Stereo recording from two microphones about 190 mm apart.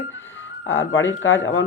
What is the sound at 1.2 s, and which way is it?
Speech, 85° left.